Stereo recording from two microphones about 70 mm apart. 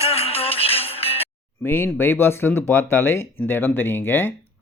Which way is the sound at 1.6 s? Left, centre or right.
Left.